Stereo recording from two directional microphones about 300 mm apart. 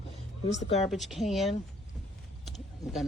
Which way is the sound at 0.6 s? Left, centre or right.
Left.